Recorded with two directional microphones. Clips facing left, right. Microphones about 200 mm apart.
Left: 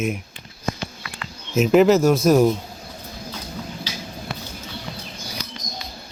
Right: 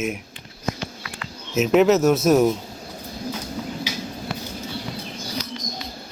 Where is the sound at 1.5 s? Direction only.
Centre (ahead or behind).